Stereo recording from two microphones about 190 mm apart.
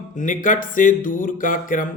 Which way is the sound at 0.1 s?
45° left (ahead or behind).